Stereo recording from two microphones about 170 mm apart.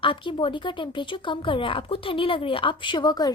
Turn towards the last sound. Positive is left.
turn(degrees=25)  # may be behind; listen again after turning